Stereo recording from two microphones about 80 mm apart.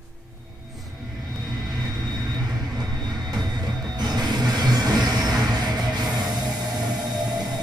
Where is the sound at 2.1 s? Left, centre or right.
Right.